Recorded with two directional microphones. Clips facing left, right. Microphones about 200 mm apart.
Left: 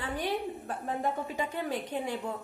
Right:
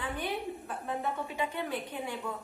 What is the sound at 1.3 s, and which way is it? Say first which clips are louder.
A woman's voice: left 1 dB; 40° left (ahead or behind).